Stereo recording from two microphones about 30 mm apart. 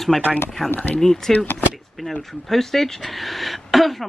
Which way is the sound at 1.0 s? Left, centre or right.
Centre.